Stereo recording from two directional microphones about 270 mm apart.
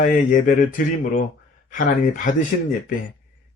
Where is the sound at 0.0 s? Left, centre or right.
Left.